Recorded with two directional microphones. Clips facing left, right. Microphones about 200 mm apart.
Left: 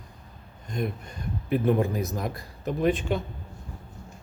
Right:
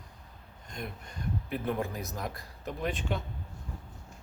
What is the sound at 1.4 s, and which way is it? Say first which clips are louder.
A man's voice: left 10 dB; 10° left (ahead or behind).